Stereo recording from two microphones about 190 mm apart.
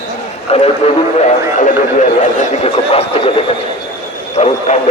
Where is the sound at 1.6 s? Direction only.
40° left (ahead or behind).